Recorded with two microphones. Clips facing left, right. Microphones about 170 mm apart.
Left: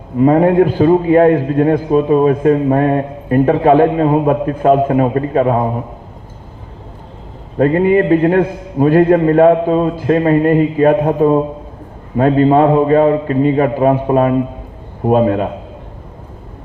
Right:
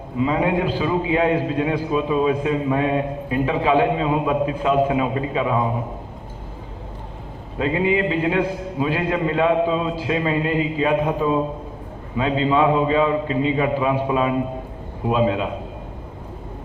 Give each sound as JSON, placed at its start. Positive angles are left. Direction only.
{"t": 0.2, "sound": "a man's voice", "side_deg": 50}
{"t": 7.6, "sound": "a man's voice", "side_deg": 50}